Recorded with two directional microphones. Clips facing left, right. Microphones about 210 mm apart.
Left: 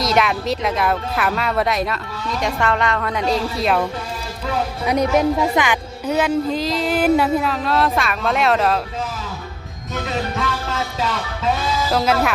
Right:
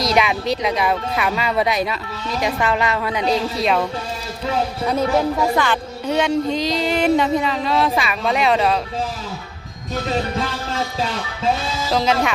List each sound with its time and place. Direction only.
0.0 s a woman's voice: centre (ahead or behind)
4.9 s a woman's voice: 15° left (ahead or behind); by 8.8 s centre (ahead or behind)
9.9 s music: 30° right (ahead or behind)
11.9 s speech: 5° left (ahead or behind)